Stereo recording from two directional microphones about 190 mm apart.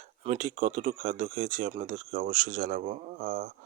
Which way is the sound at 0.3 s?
40° right (ahead or behind).